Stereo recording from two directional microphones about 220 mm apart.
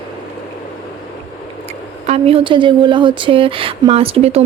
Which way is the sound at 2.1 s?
25° right (ahead or behind).